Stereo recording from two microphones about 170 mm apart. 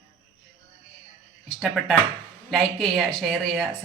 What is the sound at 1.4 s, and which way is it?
A man's voice, centre (ahead or behind).